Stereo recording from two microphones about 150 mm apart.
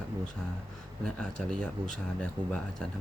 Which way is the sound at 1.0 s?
5° left (ahead or behind).